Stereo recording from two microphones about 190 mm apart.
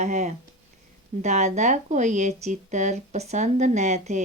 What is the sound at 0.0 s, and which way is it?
Speech, 40° right (ahead or behind).